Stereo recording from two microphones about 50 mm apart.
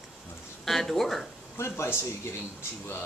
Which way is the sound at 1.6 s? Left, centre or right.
Left.